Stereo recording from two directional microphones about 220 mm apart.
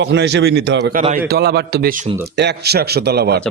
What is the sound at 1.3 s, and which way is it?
A man's voice, 45° right (ahead or behind).